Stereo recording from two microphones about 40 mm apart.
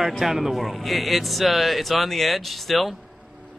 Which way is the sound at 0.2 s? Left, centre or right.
Centre.